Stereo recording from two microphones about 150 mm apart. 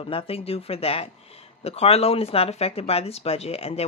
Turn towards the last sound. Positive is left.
turn(degrees=40)  # may be behind; listen again after turning